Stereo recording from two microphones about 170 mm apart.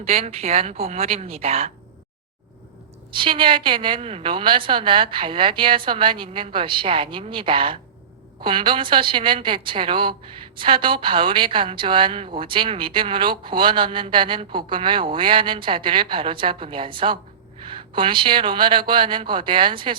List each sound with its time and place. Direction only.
0.0 s a woman's voice: 35° right (ahead or behind)
3.2 s a woman's voice: 30° right (ahead or behind)